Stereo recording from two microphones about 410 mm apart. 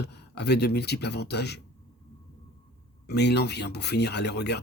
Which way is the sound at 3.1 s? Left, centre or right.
Left.